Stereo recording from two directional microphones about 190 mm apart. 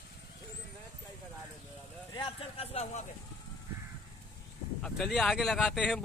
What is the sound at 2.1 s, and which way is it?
Speech, 25° left (ahead or behind).